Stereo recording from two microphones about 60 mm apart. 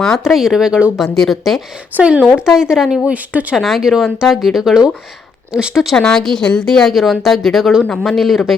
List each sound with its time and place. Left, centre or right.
0.3 s speech: centre
0.9 s speech: centre
2.0 s a woman's voice: right
2.4 s speech: centre
6.0 s speech: centre